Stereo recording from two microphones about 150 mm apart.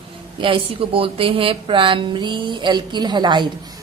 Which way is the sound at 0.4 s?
35° right (ahead or behind).